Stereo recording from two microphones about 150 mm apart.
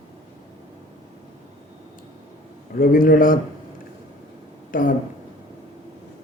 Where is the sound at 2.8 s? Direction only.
70° left (ahead or behind).